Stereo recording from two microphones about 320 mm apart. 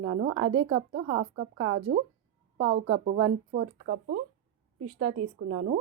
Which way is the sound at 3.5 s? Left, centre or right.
Right.